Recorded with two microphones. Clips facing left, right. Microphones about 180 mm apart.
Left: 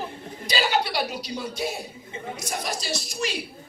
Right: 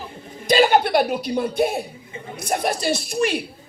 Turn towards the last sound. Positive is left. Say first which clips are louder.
# right 8 dB
turn(degrees=-55)  # may be behind; listen again after turning